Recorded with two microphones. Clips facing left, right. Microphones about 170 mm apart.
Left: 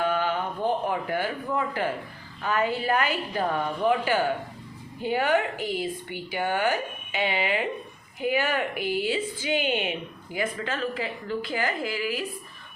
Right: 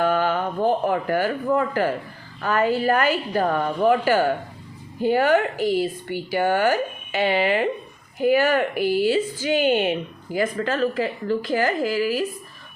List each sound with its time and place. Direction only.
0.0 s a woman's voice: 45° right (ahead or behind)